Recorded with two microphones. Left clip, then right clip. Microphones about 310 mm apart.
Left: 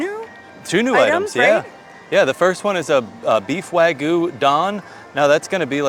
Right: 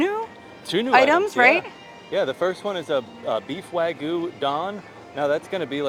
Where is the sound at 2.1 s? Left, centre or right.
Left.